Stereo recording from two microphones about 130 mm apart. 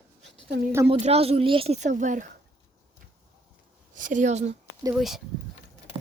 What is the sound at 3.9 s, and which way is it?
Speech, 85° right.